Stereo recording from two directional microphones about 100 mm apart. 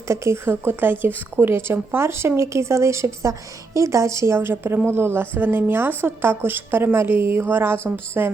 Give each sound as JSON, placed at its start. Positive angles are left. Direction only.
{"t": 0.1, "sound": "a woman's voice", "side_deg": -25}